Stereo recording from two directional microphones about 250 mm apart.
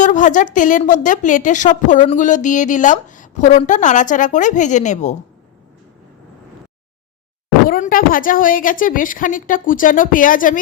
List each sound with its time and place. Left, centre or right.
0.0 s a woman's voice: left
7.7 s a woman's voice: left